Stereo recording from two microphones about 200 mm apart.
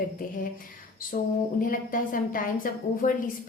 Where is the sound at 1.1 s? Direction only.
40° left (ahead or behind).